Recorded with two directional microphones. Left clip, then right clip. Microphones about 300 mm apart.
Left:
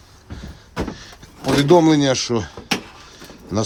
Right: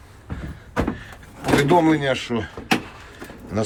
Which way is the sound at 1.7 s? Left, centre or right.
Left.